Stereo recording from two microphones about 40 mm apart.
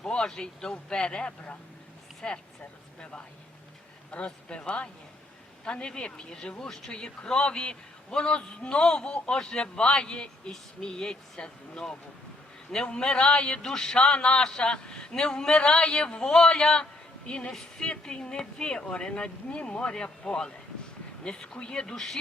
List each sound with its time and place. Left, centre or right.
0.0 s a man's voice: centre